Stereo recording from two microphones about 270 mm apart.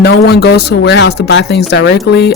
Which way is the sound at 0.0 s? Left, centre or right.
Left.